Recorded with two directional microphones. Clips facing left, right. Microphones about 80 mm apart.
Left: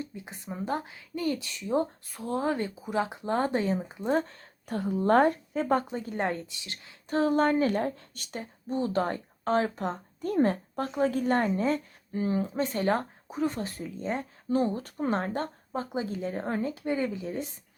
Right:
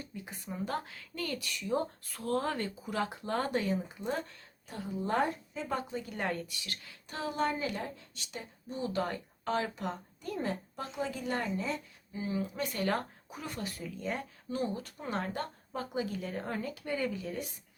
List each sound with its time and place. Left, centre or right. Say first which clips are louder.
0.0 s speech: left 5 dB; left
4.6 s speech: left 9 dB; left
7.1 s speech: left 9 dB; left
12.5 s speech: left 5 dB; left